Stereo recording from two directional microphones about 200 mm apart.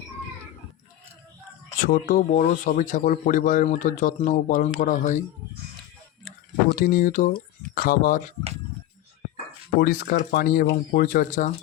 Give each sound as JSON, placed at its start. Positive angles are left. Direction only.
{"t": 1.8, "sound": "speech", "side_deg": 45}
{"t": 6.7, "sound": "speech", "side_deg": 45}
{"t": 9.8, "sound": "speech", "side_deg": 45}